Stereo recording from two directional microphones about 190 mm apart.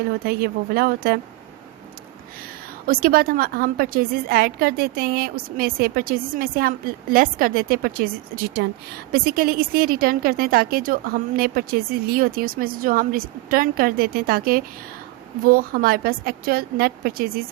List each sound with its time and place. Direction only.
0.3 s a woman's voice: 55° right (ahead or behind)
2.8 s a woman's voice: 50° right (ahead or behind)